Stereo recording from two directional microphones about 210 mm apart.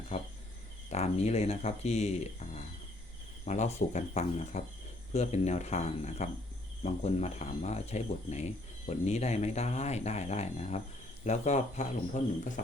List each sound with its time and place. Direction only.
0.1 s cricket: 30° left (ahead or behind)
0.9 s speech: 30° left (ahead or behind)